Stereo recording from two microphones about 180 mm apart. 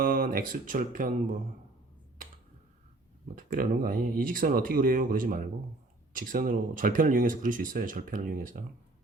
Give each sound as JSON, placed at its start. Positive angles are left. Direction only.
{"t": 0.0, "sound": "speech", "side_deg": -50}
{"t": 3.3, "sound": "speech", "side_deg": -50}